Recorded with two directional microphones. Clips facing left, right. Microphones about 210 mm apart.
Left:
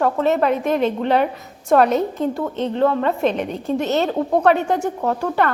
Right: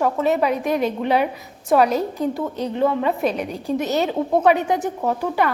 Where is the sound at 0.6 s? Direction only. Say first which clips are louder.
Left 2 dB; 10° right (ahead or behind).